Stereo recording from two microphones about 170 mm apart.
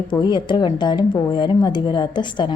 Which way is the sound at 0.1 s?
25° left (ahead or behind).